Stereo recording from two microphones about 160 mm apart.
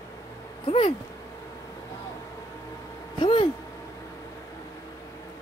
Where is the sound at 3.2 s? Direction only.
35° left (ahead or behind).